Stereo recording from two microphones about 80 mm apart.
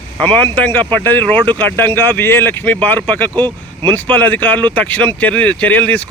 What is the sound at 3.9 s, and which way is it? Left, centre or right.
Speech, left.